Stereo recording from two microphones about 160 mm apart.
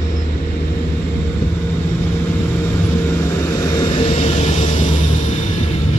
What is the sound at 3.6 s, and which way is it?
Vehicle, 35° left (ahead or behind).